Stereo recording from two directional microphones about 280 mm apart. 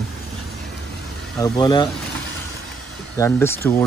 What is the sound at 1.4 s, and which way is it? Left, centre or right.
Speech, centre.